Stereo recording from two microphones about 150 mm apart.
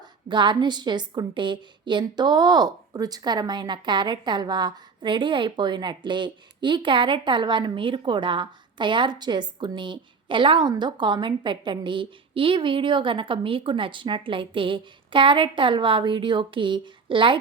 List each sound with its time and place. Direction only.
0.3 s a woman's voice: 30° right (ahead or behind)